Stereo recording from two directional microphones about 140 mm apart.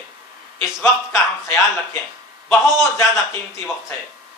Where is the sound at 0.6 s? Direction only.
15° left (ahead or behind).